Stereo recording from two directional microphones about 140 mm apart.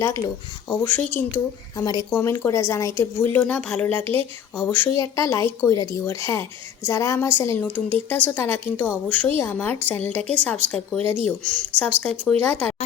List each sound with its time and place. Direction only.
0.0 s speech: 20° left (ahead or behind)
3.4 s a woman's voice: 5° left (ahead or behind)